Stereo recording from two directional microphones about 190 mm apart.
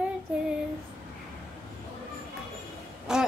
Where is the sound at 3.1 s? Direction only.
5° right (ahead or behind).